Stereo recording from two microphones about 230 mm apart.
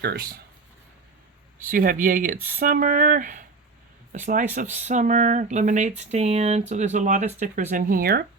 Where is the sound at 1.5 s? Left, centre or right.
Right.